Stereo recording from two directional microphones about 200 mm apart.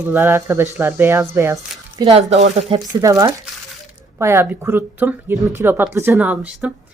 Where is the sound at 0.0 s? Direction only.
10° right (ahead or behind); by 2.9 s 25° right (ahead or behind).